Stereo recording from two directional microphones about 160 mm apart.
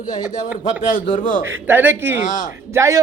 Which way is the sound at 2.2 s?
55° left (ahead or behind).